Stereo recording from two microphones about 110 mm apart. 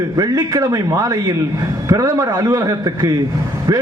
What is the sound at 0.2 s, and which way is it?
A man's voice, 30° right (ahead or behind).